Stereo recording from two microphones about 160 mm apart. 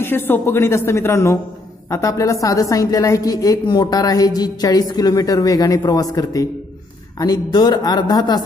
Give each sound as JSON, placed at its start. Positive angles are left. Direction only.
{"t": 0.0, "sound": "a woman's voice", "side_deg": 15}